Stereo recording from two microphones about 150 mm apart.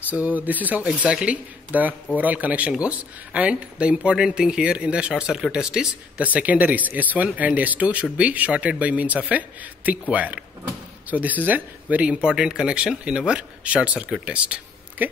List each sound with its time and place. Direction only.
0.1 s a man's voice: 10° right (ahead or behind)